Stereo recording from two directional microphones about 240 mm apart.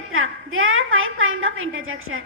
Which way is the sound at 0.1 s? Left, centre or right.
Right.